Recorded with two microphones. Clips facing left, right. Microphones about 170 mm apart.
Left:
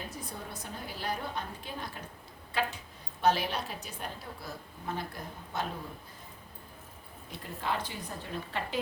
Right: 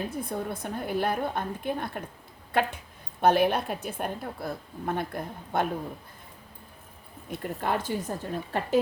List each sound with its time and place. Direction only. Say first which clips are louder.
0.1 s a woman's voice: right 10 dB; 55° right (ahead or behind)
7.3 s a woman's voice: right 6 dB; 50° right (ahead or behind)